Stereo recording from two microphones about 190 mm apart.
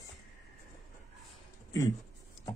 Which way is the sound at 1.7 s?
20° left (ahead or behind).